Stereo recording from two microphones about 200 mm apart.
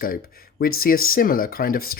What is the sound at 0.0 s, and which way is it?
Speech, 45° left (ahead or behind).